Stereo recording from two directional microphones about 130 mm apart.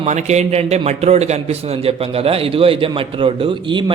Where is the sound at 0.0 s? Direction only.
60° right (ahead or behind).